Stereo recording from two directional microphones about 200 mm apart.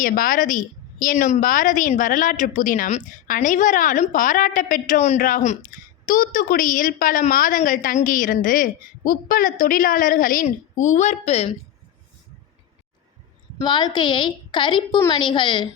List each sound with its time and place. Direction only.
0.0 s a woman's voice: 45° left (ahead or behind)
13.7 s a woman's voice: 20° left (ahead or behind)